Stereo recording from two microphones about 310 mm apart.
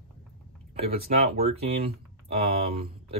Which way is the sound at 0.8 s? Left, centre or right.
Right.